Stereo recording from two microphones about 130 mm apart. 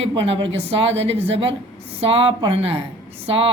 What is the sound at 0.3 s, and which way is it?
Speech, 50° right (ahead or behind).